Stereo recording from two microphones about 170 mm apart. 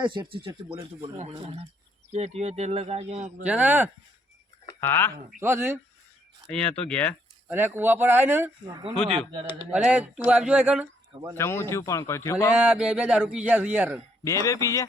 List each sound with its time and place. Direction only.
0.0 s speech: 30° right (ahead or behind); by 3.4 s 45° right (ahead or behind)
3.4 s speech: 10° right (ahead or behind)
4.8 s a man's voice: 15° left (ahead or behind)
5.4 s speech: 15° right (ahead or behind)
6.5 s a man's voice: 5° left (ahead or behind)
7.4 s speech: 10° right (ahead or behind)
8.6 s speech: 25° right (ahead or behind)
9.7 s speech: 5° right (ahead or behind)
11.3 s a man's voice: 15° left (ahead or behind)
12.5 s speech: 5° right (ahead or behind)
14.3 s speech: 20° left (ahead or behind)